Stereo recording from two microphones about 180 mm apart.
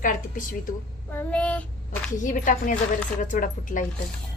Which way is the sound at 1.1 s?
10° left (ahead or behind).